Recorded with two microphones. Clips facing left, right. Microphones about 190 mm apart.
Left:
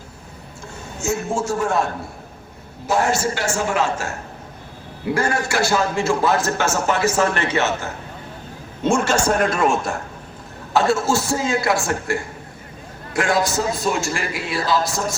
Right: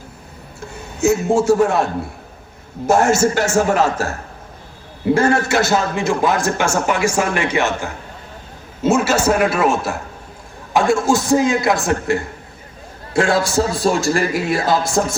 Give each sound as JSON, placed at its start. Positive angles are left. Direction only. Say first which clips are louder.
{"t": 0.9, "sound": "a man's voice", "louder": "right 8 dB", "side_deg": -65}
{"t": 2.8, "sound": "a man's voice", "louder": "right 6 dB", "side_deg": -45}
{"t": 5.0, "sound": "a man's voice", "louder": "right 6 dB", "side_deg": -25}
{"t": 10.8, "sound": "a man's voice", "louder": "right 3 dB", "side_deg": -15}